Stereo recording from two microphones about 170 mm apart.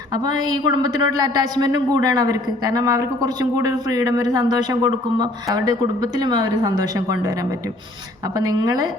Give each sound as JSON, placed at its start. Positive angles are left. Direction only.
{"t": 0.1, "sound": "speech", "side_deg": -25}
{"t": 8.4, "sound": "speech", "side_deg": -25}